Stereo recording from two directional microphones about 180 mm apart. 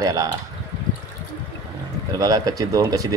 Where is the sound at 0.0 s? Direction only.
20° right (ahead or behind).